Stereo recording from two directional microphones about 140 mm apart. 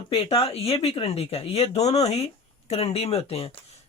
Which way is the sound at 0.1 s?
40° left (ahead or behind).